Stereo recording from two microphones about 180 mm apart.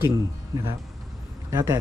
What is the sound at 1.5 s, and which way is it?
Speech, 20° right (ahead or behind).